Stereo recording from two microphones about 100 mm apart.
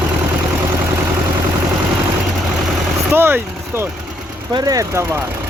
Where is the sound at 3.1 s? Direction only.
20° right (ahead or behind).